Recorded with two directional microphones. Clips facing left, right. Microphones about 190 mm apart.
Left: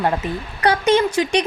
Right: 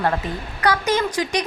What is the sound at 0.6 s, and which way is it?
Speech, 30° left (ahead or behind).